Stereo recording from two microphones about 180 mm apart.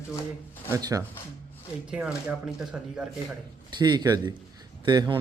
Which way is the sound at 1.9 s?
5° right (ahead or behind).